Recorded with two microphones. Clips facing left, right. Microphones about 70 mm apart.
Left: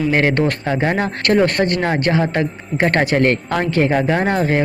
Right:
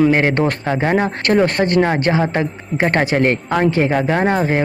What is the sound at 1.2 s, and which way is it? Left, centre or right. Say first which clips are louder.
Speech: left 2 dB; right.